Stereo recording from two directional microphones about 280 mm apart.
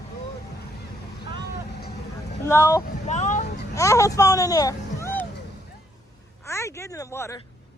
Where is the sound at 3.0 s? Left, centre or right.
Left.